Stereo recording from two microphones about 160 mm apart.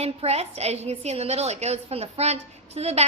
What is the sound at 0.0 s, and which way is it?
A woman's voice, 40° right (ahead or behind).